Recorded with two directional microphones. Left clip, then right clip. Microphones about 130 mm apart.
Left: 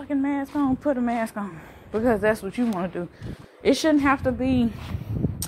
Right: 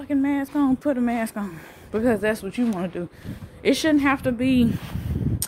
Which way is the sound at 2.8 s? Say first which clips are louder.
Even; 50° right (ahead or behind).